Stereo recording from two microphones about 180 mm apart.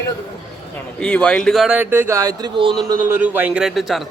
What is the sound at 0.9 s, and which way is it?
Speech, 5° left (ahead or behind).